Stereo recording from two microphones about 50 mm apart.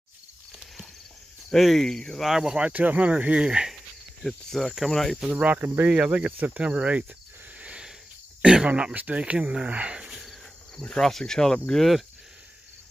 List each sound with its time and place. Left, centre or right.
0.5 s a sound: centre
1.5 s speech: centre
2.2 s speech: centre
2.7 s speech: right
3.4 s speech: centre
4.2 s speech: centre
5.3 s cricket: right
5.9 s speech: right
7.5 s a sound: right
8.4 s speech: centre
10.8 s speech: centre